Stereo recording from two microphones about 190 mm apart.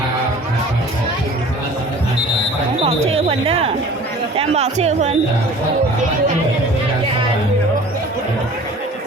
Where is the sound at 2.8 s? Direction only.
35° right (ahead or behind).